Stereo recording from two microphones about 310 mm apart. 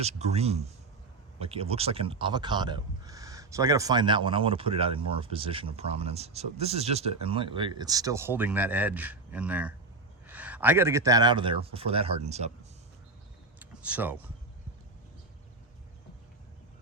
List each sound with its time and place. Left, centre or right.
0.0 s a man's voice: right
13.6 s vehicle: centre